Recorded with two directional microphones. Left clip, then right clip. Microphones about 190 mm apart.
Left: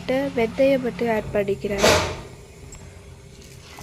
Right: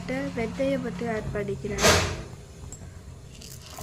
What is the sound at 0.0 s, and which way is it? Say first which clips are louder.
A woman's voice: left 8 dB; 30° left (ahead or behind).